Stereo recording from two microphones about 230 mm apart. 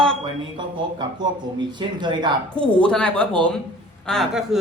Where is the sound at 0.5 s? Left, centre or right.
Centre.